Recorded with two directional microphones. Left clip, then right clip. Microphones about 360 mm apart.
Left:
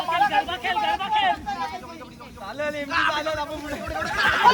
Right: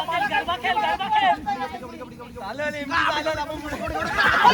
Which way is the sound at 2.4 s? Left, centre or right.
Centre.